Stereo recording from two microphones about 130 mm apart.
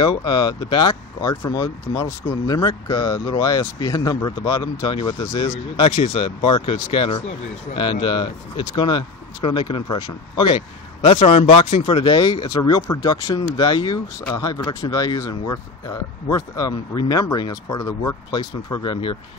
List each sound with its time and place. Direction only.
0.0 s speech: 40° left (ahead or behind)
5.9 s speech: 55° left (ahead or behind); by 10.6 s 40° left (ahead or behind)
11.1 s speech: 50° left (ahead or behind)